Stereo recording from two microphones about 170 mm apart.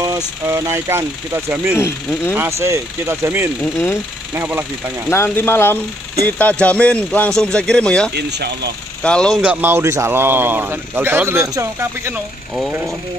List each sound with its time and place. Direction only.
0.5 s a man's voice: 15° right (ahead or behind)
1.8 s speech: 15° left (ahead or behind)
2.6 s a man's voice: 15° right (ahead or behind)
3.7 s speech: 15° left (ahead or behind)
4.3 s a man's voice: 10° right (ahead or behind)
5.1 s speech: 15° left (ahead or behind)
8.1 s speech: 75° right (ahead or behind)
9.0 s speech: 5° left (ahead or behind)
9.4 s a man's voice: 10° right (ahead or behind)